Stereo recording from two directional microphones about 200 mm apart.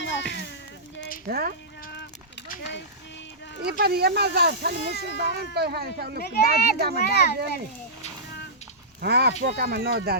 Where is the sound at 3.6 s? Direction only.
50° right (ahead or behind).